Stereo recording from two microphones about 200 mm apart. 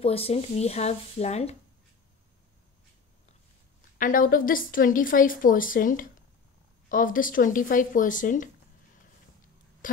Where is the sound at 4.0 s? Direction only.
45° left (ahead or behind).